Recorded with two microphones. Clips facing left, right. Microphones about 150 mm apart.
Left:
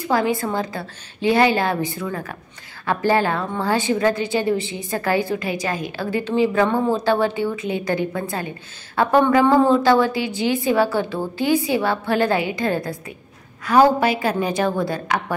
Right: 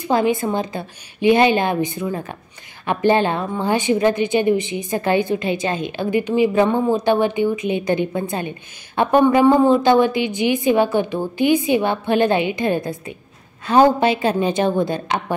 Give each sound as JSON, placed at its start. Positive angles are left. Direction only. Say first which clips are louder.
{"t": 0.0, "sound": "a woman's voice", "louder": "right 2 dB", "side_deg": -20}